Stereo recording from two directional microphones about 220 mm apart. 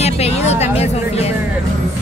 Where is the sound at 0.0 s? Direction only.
30° left (ahead or behind).